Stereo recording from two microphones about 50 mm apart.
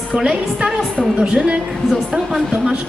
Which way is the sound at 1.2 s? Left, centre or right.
Right.